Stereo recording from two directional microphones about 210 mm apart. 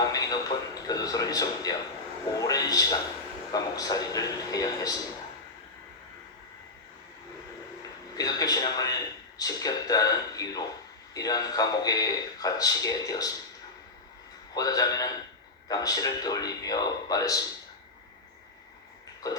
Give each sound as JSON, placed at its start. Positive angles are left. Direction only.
{"t": 0.1, "sound": "a sound", "side_deg": 15}
{"t": 2.4, "sound": "speech", "side_deg": 15}
{"t": 8.1, "sound": "a man's voice", "side_deg": 20}
{"t": 14.5, "sound": "speech", "side_deg": 15}